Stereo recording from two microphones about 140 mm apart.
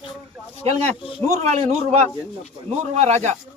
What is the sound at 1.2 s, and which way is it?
Speech, 50° right (ahead or behind).